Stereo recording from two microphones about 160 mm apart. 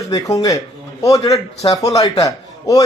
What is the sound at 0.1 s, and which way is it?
Speech, 20° left (ahead or behind).